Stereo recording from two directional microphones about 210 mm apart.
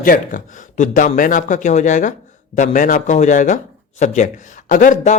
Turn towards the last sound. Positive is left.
turn(degrees=40)  # may be behind; listen again after turning